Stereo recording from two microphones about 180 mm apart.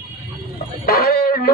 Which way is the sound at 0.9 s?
55° left (ahead or behind).